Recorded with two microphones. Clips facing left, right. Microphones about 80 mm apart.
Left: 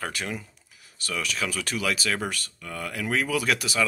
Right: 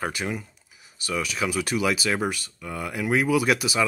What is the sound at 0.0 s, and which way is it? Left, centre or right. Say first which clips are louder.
Speech: right 3 dB; centre.